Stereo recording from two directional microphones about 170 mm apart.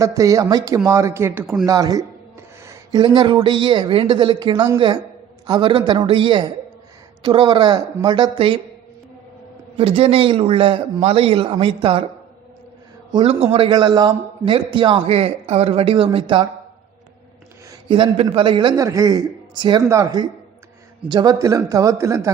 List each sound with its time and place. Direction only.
0.0 s a man's voice: 20° right (ahead or behind)
9.7 s a man's voice: 35° right (ahead or behind)
13.1 s a man's voice: 30° right (ahead or behind)
17.7 s a man's voice: 30° right (ahead or behind)